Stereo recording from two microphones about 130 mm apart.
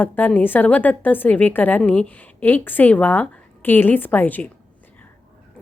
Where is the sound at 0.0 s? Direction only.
15° left (ahead or behind).